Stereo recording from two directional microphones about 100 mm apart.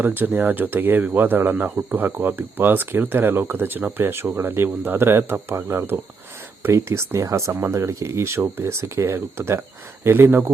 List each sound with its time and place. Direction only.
0.0 s speech: 20° right (ahead or behind)